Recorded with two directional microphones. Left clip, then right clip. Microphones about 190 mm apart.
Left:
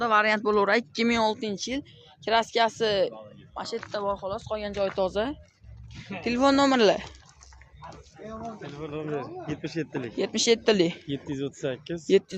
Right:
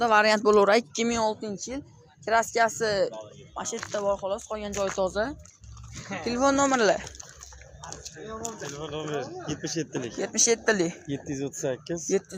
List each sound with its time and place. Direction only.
0.0 s speech: 15° right (ahead or behind)
1.0 s speech: 20° left (ahead or behind)
3.5 s speech: 5° left (ahead or behind)
4.9 s speech: 20° left (ahead or behind); by 7.1 s 45° left (ahead or behind)
8.7 s speech: 5° left (ahead or behind)
10.2 s speech: 35° left (ahead or behind)
11.1 s speech: 15° left (ahead or behind)
12.0 s speech: 30° left (ahead or behind)